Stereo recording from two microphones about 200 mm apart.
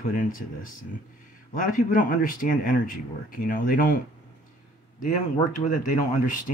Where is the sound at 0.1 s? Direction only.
40° left (ahead or behind).